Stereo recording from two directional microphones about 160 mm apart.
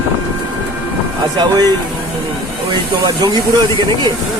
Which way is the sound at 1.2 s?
25° right (ahead or behind).